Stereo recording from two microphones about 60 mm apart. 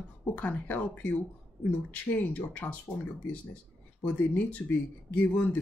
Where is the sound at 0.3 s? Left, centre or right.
Left.